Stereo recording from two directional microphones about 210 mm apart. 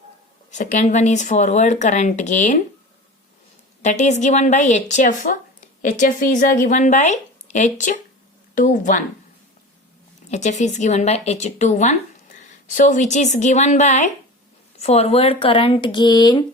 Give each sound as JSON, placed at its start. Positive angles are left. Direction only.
{"t": 0.5, "sound": "a woman's voice", "side_deg": 35}
{"t": 3.8, "sound": "a woman's voice", "side_deg": 35}
{"t": 10.2, "sound": "a woman's voice", "side_deg": 35}